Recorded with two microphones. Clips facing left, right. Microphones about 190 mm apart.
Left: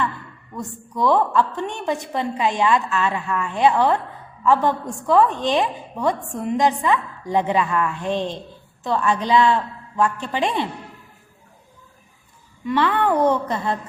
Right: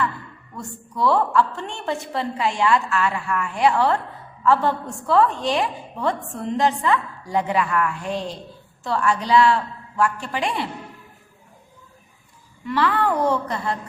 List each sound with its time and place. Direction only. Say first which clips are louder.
0.5 s a woman's voice: left 3 dB; 20° left (ahead or behind)
12.6 s a woman's voice: left 2 dB; 20° left (ahead or behind)